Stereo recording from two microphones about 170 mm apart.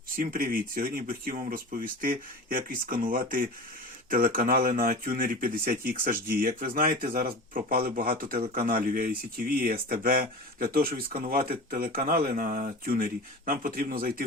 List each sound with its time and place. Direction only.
0.2 s speech: 55° right (ahead or behind)